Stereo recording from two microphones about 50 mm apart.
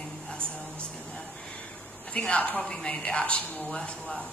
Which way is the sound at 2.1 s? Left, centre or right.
Left.